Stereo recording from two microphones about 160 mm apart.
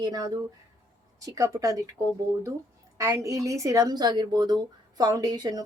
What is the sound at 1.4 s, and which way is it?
Speech, 20° right (ahead or behind).